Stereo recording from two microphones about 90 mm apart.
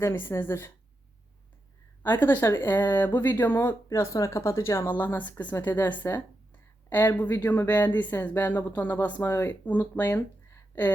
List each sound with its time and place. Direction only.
0.0 s speech: 25° left (ahead or behind)
2.0 s speech: 20° left (ahead or behind)
3.8 s speech: 35° left (ahead or behind)